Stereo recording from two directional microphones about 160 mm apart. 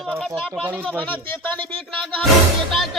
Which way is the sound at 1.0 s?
10° left (ahead or behind).